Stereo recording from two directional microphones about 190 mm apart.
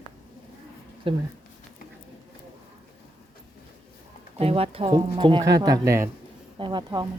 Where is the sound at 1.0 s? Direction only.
30° right (ahead or behind).